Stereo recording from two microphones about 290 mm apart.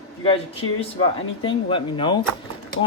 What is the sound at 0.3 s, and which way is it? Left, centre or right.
A man's voice, centre.